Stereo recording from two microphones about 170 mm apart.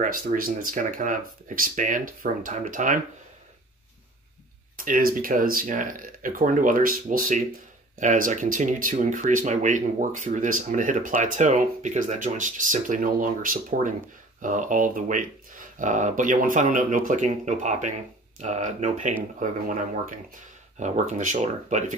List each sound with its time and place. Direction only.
0.0 s speech: 55° right (ahead or behind)
4.8 s speech: 55° right (ahead or behind)